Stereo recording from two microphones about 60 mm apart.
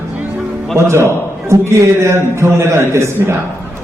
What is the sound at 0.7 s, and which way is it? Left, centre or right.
A man's voice, right.